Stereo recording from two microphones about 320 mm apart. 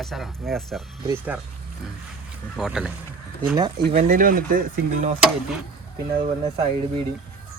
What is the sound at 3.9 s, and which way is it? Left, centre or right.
Speech, right.